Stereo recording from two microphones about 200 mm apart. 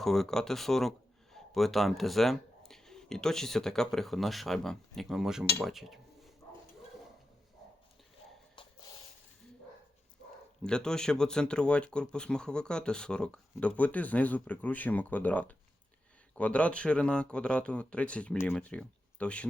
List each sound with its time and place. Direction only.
0.0 s a man's voice: centre (ahead or behind)
5.5 s dishes: centre (ahead or behind)
8.6 s a sound: 25° left (ahead or behind)
10.6 s speech: 5° left (ahead or behind)